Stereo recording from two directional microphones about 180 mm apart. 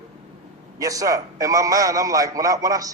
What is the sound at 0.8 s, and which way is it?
A woman's voice, 20° right (ahead or behind).